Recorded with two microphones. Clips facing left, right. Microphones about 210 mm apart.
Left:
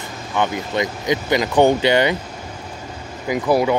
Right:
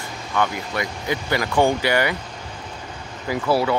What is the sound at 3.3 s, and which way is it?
Speech, 15° left (ahead or behind).